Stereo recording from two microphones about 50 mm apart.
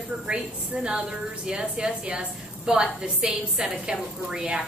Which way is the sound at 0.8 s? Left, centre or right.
Centre.